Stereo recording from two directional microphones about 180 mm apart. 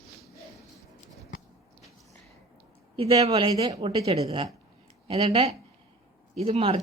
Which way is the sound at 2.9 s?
35° right (ahead or behind).